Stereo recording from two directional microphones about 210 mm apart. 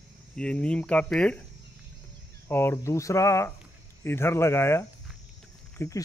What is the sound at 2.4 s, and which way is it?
Speech, 10° left (ahead or behind).